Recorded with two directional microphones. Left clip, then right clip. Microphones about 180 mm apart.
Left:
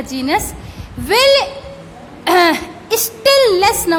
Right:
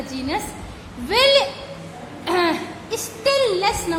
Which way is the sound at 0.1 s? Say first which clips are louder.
Left 10 dB; 40° left (ahead or behind).